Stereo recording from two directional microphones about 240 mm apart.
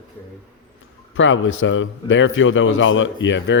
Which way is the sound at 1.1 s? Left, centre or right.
Left.